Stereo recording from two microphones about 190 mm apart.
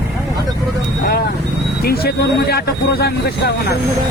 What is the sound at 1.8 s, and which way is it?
Speech, 55° left (ahead or behind).